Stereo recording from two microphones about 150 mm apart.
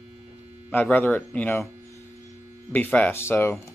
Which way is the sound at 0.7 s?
10° left (ahead or behind).